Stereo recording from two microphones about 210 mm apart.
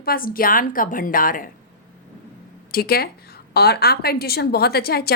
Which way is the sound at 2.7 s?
45° left (ahead or behind).